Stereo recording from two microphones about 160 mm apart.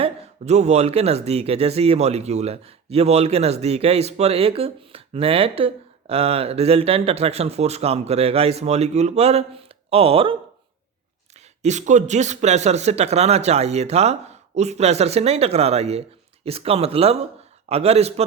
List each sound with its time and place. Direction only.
0.0 s speech: 45° right (ahead or behind)
11.3 s speech: 45° right (ahead or behind)